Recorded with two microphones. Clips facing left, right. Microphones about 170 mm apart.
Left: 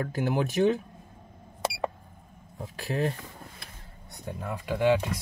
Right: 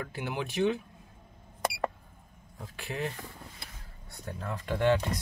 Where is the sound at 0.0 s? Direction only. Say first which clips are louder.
Left 7 dB; 40° left (ahead or behind).